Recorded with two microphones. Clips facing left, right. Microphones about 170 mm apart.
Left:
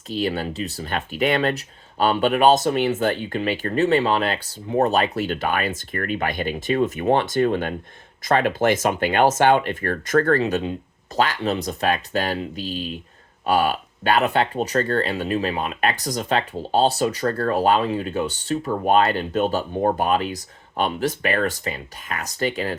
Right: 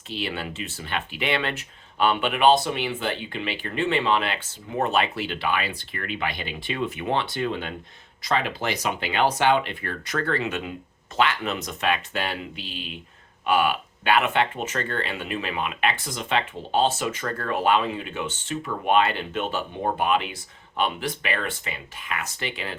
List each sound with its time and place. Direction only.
0.1 s speech: 40° left (ahead or behind)
10.4 s speech: 30° left (ahead or behind)